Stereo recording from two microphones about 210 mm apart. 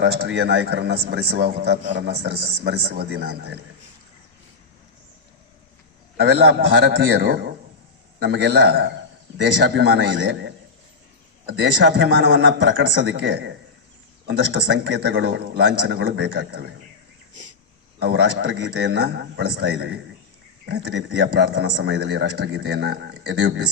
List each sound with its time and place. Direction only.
0.0 s a man's voice: 55° right (ahead or behind)
6.1 s a man's voice: 50° right (ahead or behind)
18.0 s a man's voice: 55° right (ahead or behind)